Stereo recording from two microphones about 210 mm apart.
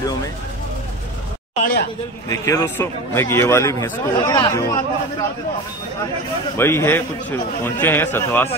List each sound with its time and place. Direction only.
1.5 s a sound: 40° left (ahead or behind)
2.2 s a man's voice: 15° left (ahead or behind)
6.6 s a man's voice: 10° left (ahead or behind)